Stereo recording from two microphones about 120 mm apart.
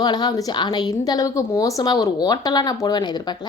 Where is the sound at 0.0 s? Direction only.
35° left (ahead or behind).